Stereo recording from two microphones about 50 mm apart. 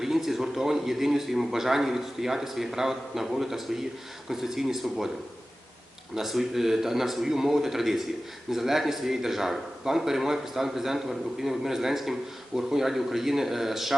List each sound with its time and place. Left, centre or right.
0.0 s speech: centre
6.1 s speech: centre